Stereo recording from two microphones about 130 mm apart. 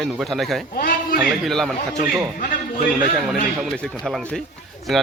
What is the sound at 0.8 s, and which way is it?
Speech, 90° left.